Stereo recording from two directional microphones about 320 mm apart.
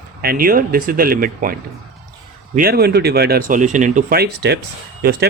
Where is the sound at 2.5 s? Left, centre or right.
Right.